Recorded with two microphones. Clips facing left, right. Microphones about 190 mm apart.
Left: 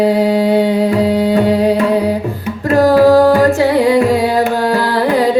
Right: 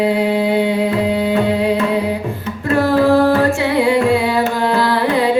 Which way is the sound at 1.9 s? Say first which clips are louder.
Left 4 dB; 40° left (ahead or behind).